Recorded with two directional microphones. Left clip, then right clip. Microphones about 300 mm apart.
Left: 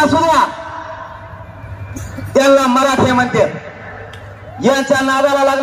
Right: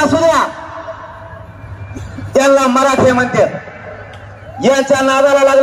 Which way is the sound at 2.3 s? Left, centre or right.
Centre.